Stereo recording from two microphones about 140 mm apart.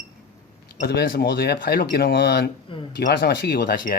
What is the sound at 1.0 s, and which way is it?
Speech, 90° left.